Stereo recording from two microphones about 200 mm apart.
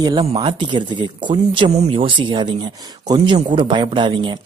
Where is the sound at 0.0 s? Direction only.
20° right (ahead or behind).